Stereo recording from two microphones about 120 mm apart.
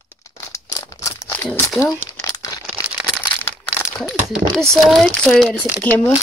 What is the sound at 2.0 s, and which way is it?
Crumpling, 30° left (ahead or behind).